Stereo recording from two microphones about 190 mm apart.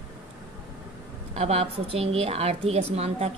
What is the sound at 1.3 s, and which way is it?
A woman's voice, 35° right (ahead or behind).